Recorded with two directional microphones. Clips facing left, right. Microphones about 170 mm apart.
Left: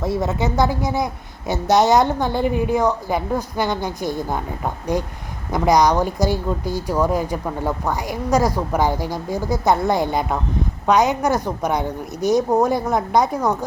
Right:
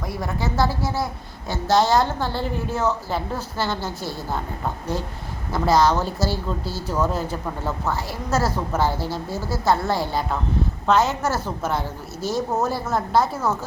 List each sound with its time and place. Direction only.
0.0 s a woman's voice: 25° left (ahead or behind)